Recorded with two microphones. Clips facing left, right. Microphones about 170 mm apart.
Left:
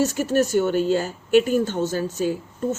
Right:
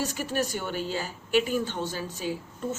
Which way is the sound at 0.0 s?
45° left (ahead or behind).